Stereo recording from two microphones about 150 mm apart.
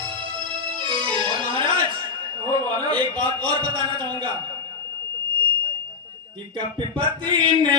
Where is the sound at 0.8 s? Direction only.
35° right (ahead or behind).